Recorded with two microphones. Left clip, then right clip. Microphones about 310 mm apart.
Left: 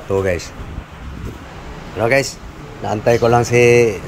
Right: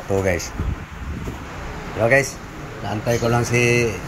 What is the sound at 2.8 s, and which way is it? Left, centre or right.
Speech, centre.